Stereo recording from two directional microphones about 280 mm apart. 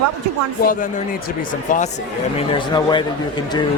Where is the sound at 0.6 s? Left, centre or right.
Left.